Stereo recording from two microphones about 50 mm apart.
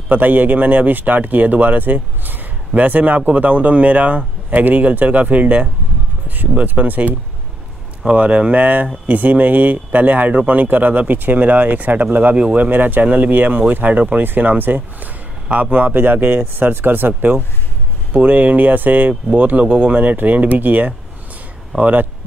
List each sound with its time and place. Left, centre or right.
0.1 s speech: right
8.1 s speech: right